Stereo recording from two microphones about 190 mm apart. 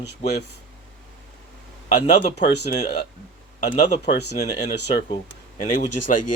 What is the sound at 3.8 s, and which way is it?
Speech, 35° left (ahead or behind).